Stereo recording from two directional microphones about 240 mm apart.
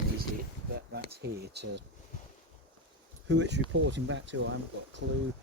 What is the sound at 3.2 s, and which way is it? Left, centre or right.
Speech, right.